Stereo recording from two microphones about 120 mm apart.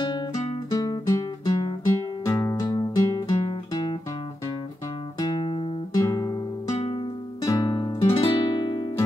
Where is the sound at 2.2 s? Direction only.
25° left (ahead or behind).